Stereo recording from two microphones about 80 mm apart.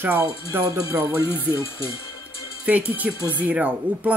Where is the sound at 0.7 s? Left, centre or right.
Right.